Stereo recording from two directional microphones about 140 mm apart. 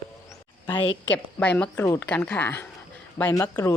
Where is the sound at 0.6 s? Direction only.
35° left (ahead or behind).